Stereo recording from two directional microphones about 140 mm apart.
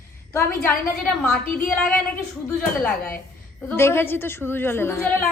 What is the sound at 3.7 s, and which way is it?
A woman's voice, 15° left (ahead or behind).